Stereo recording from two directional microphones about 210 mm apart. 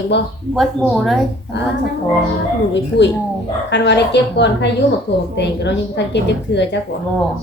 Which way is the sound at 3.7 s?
55° left (ahead or behind).